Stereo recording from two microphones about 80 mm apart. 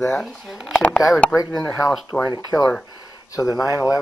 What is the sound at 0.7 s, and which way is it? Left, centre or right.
Speech, centre.